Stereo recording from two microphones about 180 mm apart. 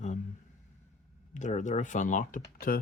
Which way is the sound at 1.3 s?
40° left (ahead or behind).